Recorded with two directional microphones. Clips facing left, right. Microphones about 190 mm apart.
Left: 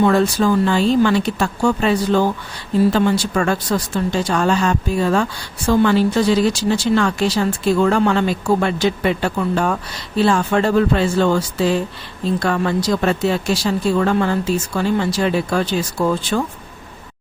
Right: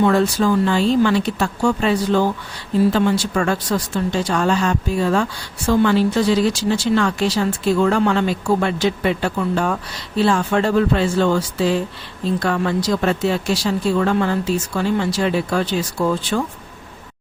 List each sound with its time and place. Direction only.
0.0 s speech: 45° left (ahead or behind)